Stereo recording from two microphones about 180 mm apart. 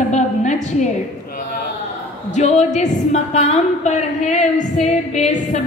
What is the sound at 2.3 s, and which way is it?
A woman's voice, 40° left (ahead or behind).